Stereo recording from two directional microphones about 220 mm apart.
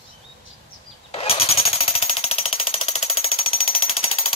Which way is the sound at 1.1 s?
25° left (ahead or behind).